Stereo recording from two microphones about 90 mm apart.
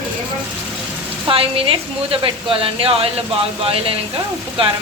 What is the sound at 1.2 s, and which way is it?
A woman's voice, 90° right.